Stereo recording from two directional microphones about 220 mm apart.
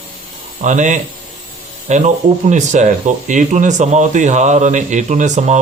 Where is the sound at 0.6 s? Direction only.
35° right (ahead or behind).